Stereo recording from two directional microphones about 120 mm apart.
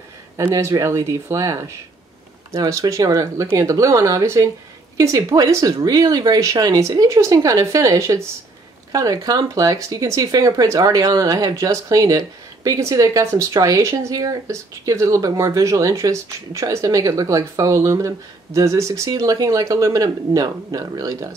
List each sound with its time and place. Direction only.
0.4 s speech: 25° right (ahead or behind)